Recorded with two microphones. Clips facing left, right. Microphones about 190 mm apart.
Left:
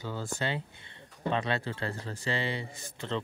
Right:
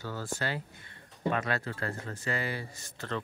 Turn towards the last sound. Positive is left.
turn(degrees=25)  # may be behind; listen again after turning